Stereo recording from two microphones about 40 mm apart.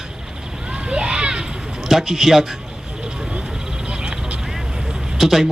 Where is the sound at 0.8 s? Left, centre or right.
Right.